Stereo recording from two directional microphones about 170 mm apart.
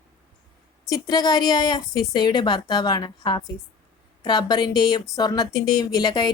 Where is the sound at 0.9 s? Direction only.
25° left (ahead or behind).